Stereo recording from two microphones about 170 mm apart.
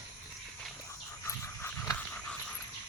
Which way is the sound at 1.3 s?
15° left (ahead or behind).